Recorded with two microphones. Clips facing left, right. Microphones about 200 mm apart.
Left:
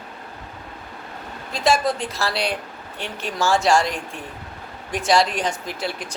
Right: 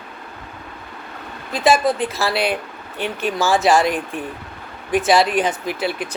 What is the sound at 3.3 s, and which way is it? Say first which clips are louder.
Speech: right 2 dB; 5° right (ahead or behind).